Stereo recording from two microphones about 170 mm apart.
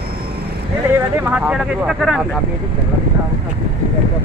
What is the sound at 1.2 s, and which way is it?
Speech, 10° right (ahead or behind).